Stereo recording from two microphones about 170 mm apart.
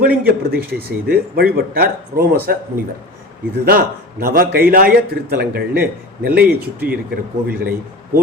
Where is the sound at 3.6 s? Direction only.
60° right (ahead or behind).